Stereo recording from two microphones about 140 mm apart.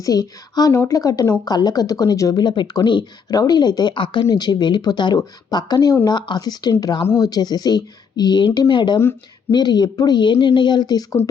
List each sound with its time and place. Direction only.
0.0 s speech: 25° left (ahead or behind)